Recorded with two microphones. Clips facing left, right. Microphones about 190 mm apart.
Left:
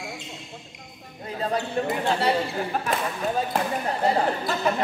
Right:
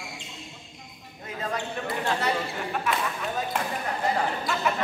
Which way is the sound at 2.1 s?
35° left (ahead or behind).